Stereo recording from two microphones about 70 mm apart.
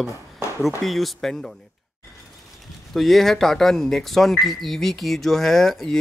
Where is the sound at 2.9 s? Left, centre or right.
Centre.